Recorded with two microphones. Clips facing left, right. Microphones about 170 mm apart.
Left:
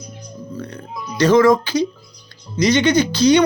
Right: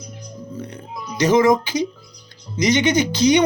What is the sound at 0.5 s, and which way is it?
Speech, 20° right (ahead or behind).